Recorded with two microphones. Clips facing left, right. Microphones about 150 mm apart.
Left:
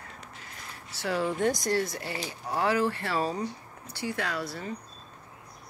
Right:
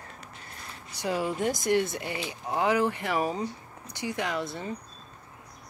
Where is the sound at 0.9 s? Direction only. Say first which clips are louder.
Even; 15° right (ahead or behind).